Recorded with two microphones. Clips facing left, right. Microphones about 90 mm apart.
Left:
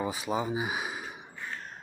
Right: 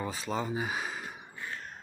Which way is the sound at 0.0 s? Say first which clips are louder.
Left 3 dB; 15° left (ahead or behind).